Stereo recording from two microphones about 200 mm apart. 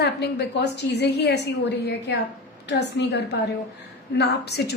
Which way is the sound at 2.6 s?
60° left (ahead or behind).